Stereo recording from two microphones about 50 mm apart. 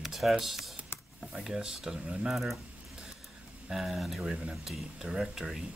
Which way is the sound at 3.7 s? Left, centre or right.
Centre.